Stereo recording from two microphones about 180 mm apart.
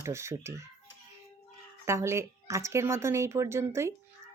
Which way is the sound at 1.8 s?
15° right (ahead or behind).